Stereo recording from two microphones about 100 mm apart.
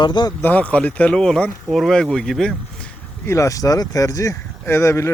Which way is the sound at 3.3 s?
30° left (ahead or behind).